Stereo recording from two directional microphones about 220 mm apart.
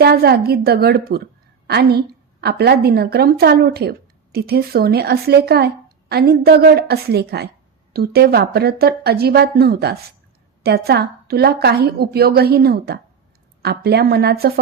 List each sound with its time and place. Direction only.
0.0 s a woman's voice: 45° right (ahead or behind)